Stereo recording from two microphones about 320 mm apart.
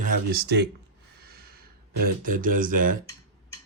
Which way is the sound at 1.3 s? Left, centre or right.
Right.